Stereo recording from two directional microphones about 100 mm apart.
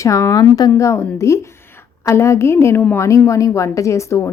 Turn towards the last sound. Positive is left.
turn(degrees=30)  # may be behind; listen again after turning